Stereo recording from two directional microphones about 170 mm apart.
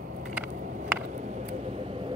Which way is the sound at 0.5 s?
50° right (ahead or behind).